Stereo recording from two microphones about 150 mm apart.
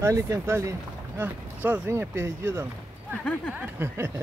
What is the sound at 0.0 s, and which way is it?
Speech, 20° right (ahead or behind).